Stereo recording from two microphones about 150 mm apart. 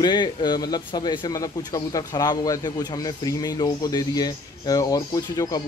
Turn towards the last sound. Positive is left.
turn(degrees=25)  # may be behind; listen again after turning